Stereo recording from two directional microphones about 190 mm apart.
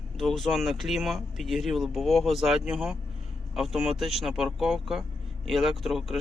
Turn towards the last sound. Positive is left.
turn(degrees=0)  # may be behind; listen again after turning